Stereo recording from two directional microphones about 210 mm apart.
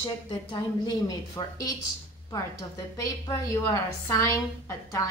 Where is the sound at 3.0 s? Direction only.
15° left (ahead or behind).